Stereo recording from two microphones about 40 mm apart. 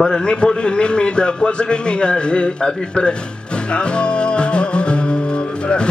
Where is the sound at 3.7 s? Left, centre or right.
Left.